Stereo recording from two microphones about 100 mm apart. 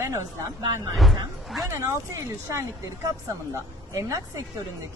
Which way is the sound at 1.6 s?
30° right (ahead or behind).